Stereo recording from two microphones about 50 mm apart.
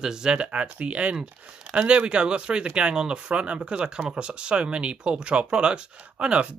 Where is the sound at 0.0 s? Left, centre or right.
Centre.